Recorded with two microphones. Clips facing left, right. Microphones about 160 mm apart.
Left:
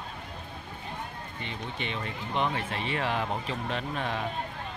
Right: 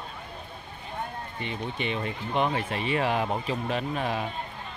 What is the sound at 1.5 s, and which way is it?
Speech, 15° right (ahead or behind).